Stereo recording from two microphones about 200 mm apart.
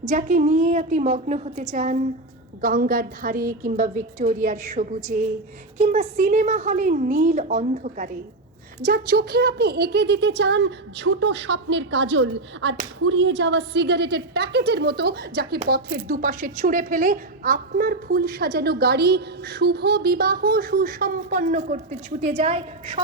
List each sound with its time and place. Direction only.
0.0 s a woman's voice: 40° right (ahead or behind)